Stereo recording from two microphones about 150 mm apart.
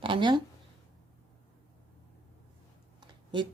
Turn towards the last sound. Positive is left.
turn(degrees=-30)  # may be behind; listen again after turning